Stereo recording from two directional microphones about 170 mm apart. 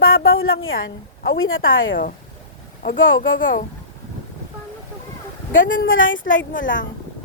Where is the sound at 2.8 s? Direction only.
90° left.